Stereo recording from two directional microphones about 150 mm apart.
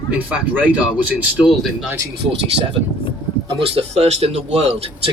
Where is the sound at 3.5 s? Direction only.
40° right (ahead or behind).